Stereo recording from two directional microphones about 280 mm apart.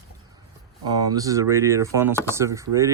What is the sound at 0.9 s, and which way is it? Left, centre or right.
Speech, centre.